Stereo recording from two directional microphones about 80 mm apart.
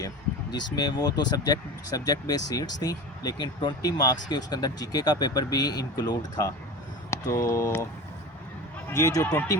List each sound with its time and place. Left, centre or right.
0.8 s speech: left
7.1 s speech: left
9.0 s speech: left
9.2 s speech: left